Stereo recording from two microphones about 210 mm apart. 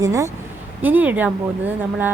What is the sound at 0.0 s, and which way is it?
A woman's voice, 15° right (ahead or behind).